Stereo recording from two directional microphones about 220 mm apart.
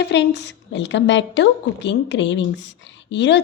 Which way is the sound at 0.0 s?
50° left (ahead or behind).